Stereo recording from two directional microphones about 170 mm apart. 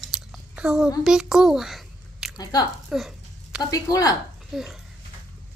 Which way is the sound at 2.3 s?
25° left (ahead or behind).